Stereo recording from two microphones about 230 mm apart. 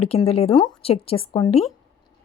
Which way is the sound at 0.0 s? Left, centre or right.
Left.